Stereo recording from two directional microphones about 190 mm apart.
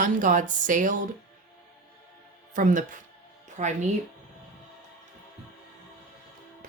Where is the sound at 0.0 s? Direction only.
40° right (ahead or behind).